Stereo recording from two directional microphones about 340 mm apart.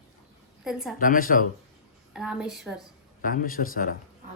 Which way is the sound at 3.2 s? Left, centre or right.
Left.